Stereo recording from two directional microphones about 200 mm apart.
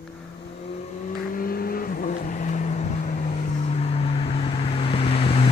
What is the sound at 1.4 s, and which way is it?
Vehicle, 45° left (ahead or behind).